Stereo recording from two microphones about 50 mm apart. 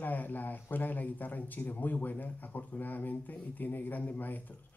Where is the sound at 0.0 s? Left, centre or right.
Left.